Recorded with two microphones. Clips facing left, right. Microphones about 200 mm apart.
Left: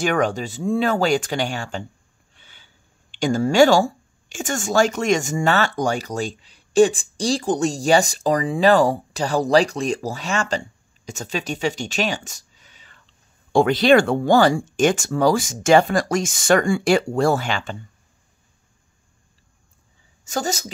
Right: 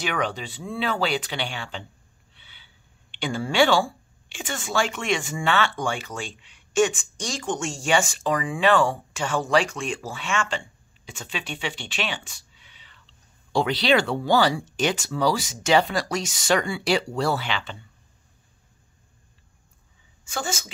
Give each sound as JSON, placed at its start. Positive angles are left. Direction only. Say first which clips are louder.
{"t": 0.0, "sound": "speech", "louder": "left 7 dB", "side_deg": 45}
{"t": 20.2, "sound": "a woman's voice", "louder": "left 6 dB", "side_deg": 40}